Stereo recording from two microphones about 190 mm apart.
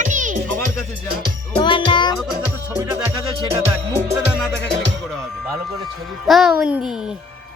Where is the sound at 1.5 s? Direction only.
25° left (ahead or behind).